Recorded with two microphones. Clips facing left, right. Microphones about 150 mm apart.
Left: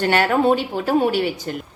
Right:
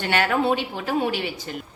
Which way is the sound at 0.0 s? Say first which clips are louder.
Left 5 dB; 40° left (ahead or behind).